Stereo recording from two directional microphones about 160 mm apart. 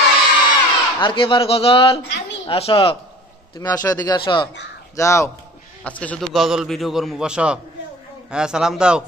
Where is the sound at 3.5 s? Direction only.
25° left (ahead or behind).